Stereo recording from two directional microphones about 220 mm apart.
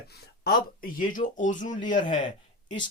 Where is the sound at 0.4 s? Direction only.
40° left (ahead or behind).